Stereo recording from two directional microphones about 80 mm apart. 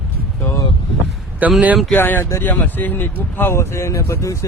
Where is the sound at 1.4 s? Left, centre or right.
Right.